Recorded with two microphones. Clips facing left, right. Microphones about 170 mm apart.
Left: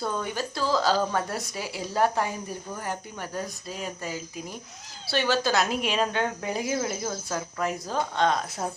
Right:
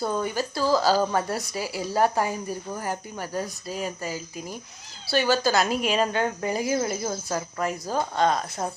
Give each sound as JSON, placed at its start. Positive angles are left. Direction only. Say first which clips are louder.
{"t": 0.0, "sound": "speech", "louder": "right 3 dB", "side_deg": -5}